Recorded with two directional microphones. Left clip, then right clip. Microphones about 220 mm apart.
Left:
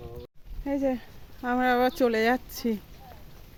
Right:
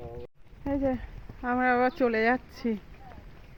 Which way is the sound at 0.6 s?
10° left (ahead or behind).